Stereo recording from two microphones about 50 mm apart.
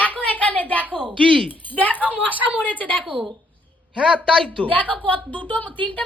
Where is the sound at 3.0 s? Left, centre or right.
Centre.